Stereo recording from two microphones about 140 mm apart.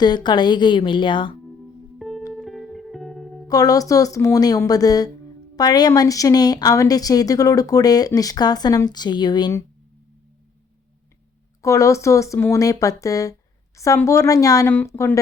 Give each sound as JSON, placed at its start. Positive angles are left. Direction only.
{"t": 0.0, "sound": "a woman's voice", "side_deg": 30}
{"t": 2.0, "sound": "music", "side_deg": 0}
{"t": 3.4, "sound": "a woman's voice", "side_deg": 25}
{"t": 11.6, "sound": "a woman's voice", "side_deg": 20}